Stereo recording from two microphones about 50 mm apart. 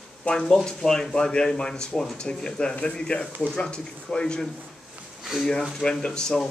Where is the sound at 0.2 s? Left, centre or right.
Centre.